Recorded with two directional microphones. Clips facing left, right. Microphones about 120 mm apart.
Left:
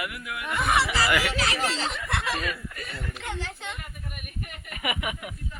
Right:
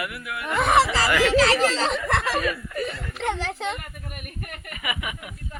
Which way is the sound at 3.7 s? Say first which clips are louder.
Right 4 dB; 60° right (ahead or behind).